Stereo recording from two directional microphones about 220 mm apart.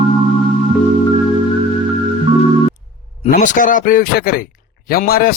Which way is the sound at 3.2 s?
35° left (ahead or behind).